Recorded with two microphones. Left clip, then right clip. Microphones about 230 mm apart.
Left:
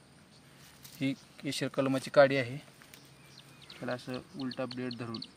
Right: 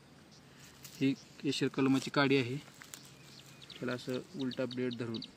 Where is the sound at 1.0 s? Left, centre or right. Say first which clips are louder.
Right 2 dB; left; by 5.3 s centre.